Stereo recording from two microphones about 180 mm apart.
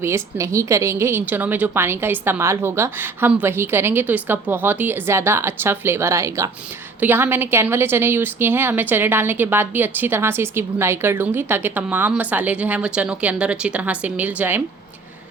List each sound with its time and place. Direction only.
0.0 s a woman's voice: 15° right (ahead or behind)